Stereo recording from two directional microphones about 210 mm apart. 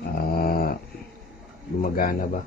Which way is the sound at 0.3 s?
45° left (ahead or behind).